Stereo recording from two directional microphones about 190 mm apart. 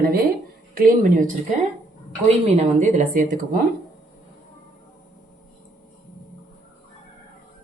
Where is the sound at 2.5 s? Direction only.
35° right (ahead or behind).